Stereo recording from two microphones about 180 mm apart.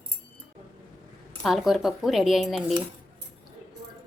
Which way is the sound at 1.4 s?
Centre (ahead or behind).